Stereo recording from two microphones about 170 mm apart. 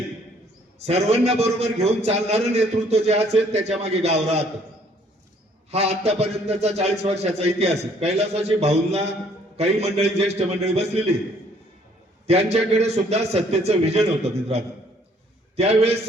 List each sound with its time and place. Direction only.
0.9 s a man's voice: 40° right (ahead or behind)
5.7 s a man's voice: 40° right (ahead or behind)
12.2 s a man's voice: 40° right (ahead or behind)